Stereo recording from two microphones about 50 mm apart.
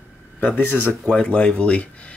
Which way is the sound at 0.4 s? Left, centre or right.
Left.